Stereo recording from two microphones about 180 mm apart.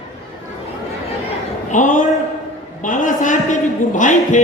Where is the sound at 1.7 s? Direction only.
45° left (ahead or behind).